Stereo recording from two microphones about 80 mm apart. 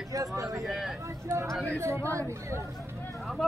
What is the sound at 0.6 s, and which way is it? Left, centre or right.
Speech, centre.